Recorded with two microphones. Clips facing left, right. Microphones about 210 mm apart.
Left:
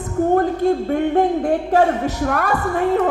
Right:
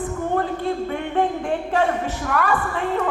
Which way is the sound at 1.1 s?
40° left (ahead or behind).